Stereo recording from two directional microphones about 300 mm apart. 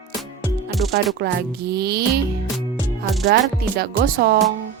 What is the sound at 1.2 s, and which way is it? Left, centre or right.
Music, right.